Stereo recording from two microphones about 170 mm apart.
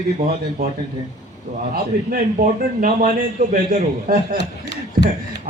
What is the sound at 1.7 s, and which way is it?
A man's voice, 55° right (ahead or behind).